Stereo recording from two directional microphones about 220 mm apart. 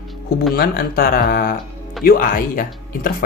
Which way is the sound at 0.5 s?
40° left (ahead or behind).